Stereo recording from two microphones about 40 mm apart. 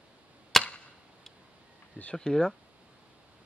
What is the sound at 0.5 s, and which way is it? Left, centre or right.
Arrow, centre.